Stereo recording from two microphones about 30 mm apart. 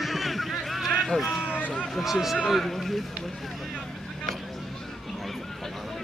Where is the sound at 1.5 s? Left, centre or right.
Left.